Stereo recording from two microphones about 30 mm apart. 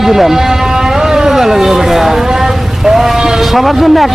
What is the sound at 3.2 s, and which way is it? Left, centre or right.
Sheep, centre.